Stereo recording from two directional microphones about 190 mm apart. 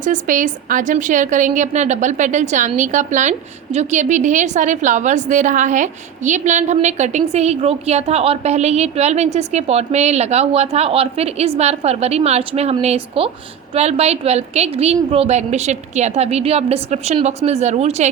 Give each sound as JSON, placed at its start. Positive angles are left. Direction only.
{"t": 0.0, "sound": "a woman's voice", "side_deg": -40}